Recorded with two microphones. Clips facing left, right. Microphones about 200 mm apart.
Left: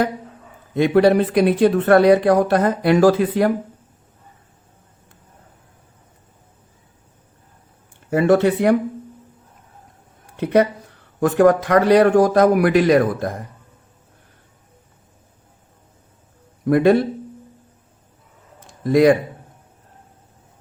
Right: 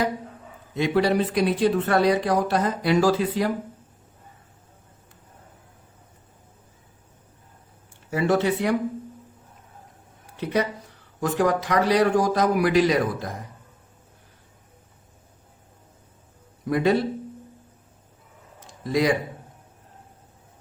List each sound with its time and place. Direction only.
0.7 s speech: 55° left (ahead or behind)
8.1 s speech: 55° left (ahead or behind)
10.4 s speech: 55° left (ahead or behind)
16.6 s speech: 55° left (ahead or behind)
18.8 s speech: 55° left (ahead or behind)